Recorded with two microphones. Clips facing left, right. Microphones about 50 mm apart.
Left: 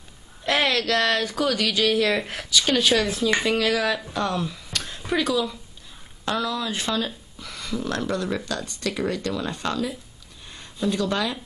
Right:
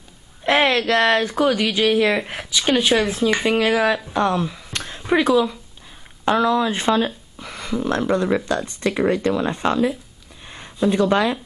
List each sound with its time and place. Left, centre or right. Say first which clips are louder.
0.4 s speech: right 5 dB; right